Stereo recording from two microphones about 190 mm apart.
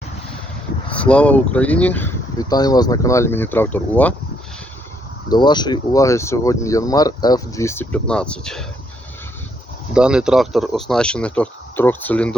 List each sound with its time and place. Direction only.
0.9 s speech: 5° left (ahead or behind)
5.3 s speech: 25° left (ahead or behind); by 8.6 s 5° left (ahead or behind)
9.9 s speech: 5° right (ahead or behind)